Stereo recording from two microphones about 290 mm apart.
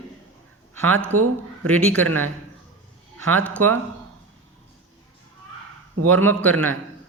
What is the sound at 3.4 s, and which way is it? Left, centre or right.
Speech, centre.